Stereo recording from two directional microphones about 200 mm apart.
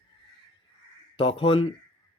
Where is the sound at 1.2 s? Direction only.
25° left (ahead or behind).